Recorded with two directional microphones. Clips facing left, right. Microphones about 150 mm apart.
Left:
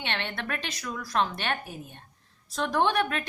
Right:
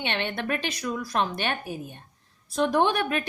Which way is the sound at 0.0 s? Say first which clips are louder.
Right 4 dB; 15° right (ahead or behind).